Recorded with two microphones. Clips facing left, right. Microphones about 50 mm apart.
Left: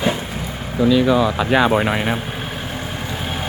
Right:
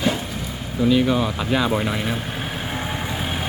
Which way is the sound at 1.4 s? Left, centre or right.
Left.